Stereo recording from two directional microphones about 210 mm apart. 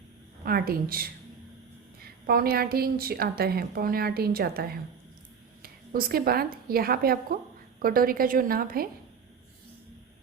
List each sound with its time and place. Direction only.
0.4 s a woman's voice: 45° right (ahead or behind)
2.2 s a woman's voice: 45° right (ahead or behind)